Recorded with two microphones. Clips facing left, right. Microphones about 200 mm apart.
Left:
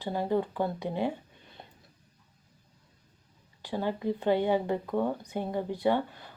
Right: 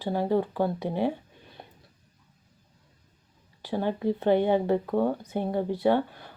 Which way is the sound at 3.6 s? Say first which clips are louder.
Right 3 dB; 20° right (ahead or behind).